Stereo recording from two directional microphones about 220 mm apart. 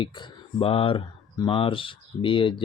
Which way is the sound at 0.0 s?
20° left (ahead or behind).